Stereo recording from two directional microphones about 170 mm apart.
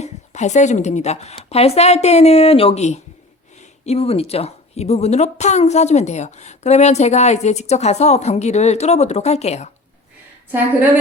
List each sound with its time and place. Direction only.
0.0 s speech: 45° left (ahead or behind)